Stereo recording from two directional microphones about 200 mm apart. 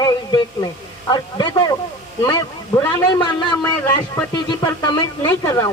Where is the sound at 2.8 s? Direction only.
20° left (ahead or behind).